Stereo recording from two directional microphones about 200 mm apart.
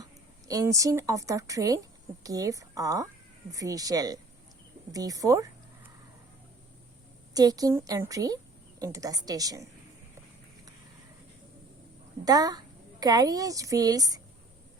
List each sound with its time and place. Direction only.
0.0 s a woman's voice: 15° right (ahead or behind)
7.3 s a woman's voice: 20° right (ahead or behind)
12.2 s a child's voice: 20° right (ahead or behind)